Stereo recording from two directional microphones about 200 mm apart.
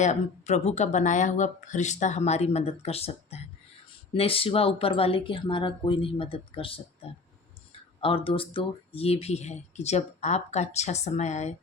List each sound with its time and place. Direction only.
0.0 s speech: 35° left (ahead or behind)